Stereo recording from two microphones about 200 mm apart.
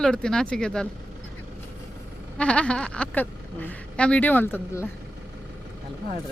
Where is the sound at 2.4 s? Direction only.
5° left (ahead or behind).